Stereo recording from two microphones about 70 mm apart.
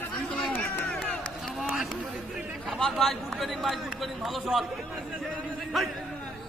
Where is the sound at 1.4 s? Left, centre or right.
Centre.